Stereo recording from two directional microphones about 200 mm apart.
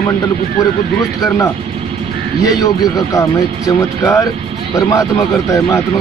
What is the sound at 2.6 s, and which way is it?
Speech, 15° left (ahead or behind).